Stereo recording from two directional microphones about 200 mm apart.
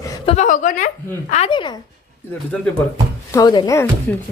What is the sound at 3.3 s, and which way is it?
Speech, 20° left (ahead or behind).